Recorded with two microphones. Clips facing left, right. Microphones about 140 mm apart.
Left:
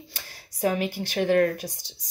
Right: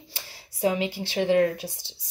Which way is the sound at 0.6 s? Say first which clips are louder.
Even; 20° right (ahead or behind).